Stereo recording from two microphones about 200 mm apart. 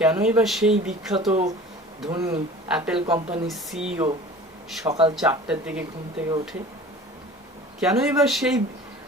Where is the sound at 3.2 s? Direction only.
35° right (ahead or behind).